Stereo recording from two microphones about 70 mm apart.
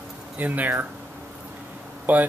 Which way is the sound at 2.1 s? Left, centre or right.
Right.